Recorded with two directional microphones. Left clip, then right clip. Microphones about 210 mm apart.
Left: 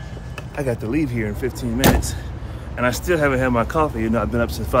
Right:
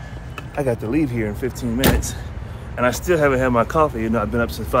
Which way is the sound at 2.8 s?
5° left (ahead or behind).